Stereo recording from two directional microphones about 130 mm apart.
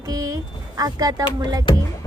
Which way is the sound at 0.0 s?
30° right (ahead or behind).